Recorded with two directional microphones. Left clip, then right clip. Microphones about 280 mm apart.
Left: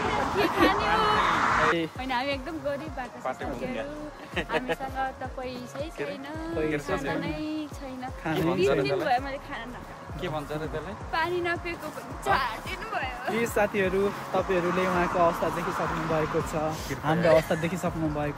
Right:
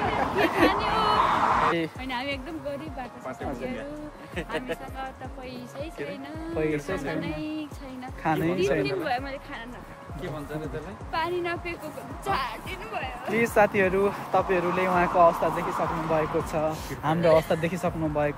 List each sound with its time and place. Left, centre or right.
0.1 s a sound: centre
1.1 s a sound: centre
1.8 s speech: centre
4.4 s speech: centre
5.8 s speech: centre
11.1 s speech: centre; by 16.4 s right
16.5 s speech: centre